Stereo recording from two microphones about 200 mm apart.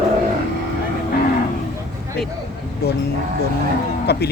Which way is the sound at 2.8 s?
55° left (ahead or behind).